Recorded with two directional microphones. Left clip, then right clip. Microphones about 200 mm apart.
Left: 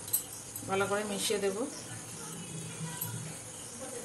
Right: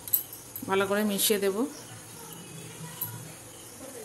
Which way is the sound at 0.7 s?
55° right (ahead or behind).